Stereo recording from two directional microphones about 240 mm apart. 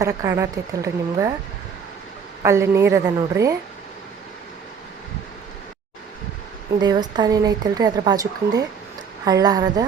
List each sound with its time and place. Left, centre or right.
0.0 s speech: centre
2.4 s speech: centre
6.8 s speech: centre